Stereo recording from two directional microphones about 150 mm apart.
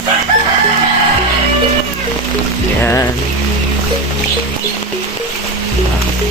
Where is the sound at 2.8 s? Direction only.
15° left (ahead or behind).